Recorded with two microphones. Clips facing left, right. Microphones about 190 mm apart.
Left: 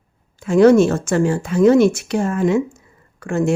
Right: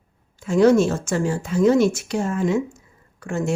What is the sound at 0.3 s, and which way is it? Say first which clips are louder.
Speech: left 4 dB; 60° left (ahead or behind).